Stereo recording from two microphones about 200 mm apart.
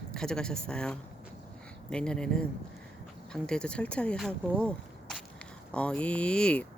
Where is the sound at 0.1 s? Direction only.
5° left (ahead or behind).